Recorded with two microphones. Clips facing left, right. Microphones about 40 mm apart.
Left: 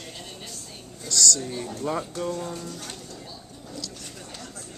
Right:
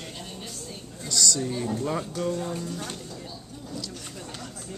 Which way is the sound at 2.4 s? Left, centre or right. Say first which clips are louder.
Right 3 dB; centre.